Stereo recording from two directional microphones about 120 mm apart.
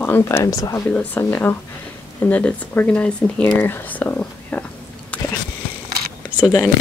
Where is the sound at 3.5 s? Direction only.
15° left (ahead or behind).